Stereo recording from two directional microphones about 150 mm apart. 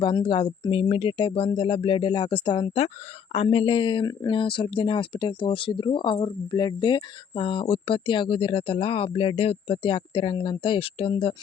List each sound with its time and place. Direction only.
0.0 s speech: 30° left (ahead or behind)